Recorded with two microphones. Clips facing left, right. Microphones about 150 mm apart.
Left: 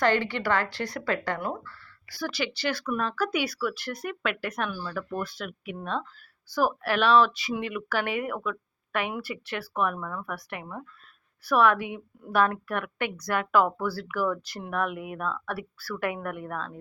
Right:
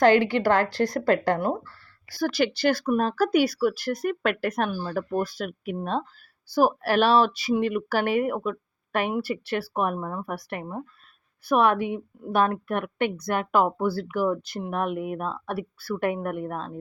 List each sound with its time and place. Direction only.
0.0 s speech: 45° right (ahead or behind)
11.4 s speech: 25° right (ahead or behind)
13.1 s speech: 55° right (ahead or behind)
13.3 s speech: 20° right (ahead or behind)